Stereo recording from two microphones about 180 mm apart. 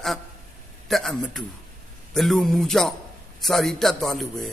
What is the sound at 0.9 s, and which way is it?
A man's voice, centre (ahead or behind).